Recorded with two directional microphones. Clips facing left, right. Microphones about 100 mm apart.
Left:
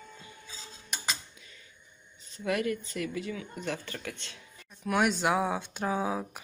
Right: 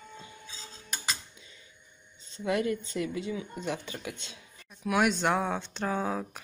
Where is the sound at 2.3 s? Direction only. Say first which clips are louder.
Right 1 dB; 25° right (ahead or behind).